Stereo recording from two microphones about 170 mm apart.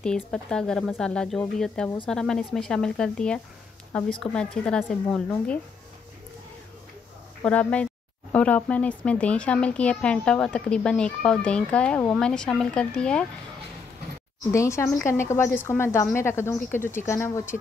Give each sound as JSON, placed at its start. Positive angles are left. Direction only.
{"t": 0.0, "sound": "speech", "side_deg": 5}
{"t": 7.4, "sound": "speech", "side_deg": 5}
{"t": 14.5, "sound": "speech", "side_deg": 15}